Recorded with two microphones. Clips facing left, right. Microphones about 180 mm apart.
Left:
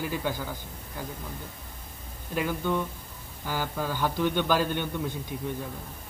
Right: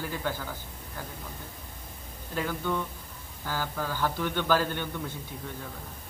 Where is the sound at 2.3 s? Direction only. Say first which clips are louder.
Left 3 dB; 15° left (ahead or behind).